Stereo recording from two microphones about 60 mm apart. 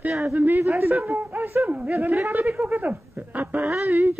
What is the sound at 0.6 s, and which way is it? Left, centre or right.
Speech, right.